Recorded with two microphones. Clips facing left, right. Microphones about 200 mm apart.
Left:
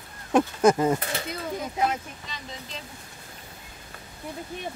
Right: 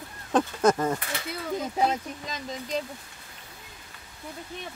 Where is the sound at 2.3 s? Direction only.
40° right (ahead or behind).